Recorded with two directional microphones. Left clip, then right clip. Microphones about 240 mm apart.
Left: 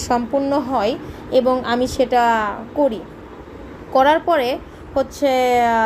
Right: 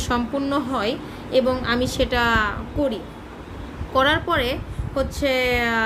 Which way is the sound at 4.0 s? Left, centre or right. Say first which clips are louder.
Left 5 dB; centre.